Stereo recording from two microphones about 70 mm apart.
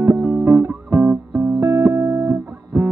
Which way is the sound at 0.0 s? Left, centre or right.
Right.